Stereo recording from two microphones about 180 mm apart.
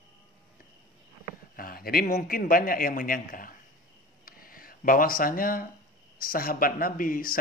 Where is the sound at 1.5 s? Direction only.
55° left (ahead or behind).